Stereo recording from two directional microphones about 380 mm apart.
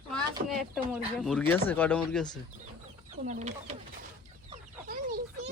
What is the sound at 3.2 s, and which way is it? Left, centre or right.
Speech, centre.